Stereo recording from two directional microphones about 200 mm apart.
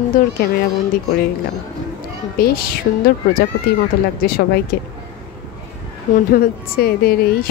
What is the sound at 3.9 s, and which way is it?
Speech, 50° left (ahead or behind).